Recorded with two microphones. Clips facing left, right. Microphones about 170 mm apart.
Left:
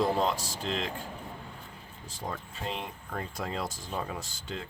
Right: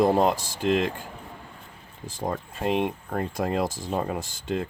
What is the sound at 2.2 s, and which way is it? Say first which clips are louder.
Speech: right 9 dB; 50° right (ahead or behind).